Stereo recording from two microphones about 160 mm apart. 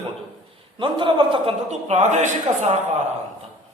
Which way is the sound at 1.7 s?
45° right (ahead or behind).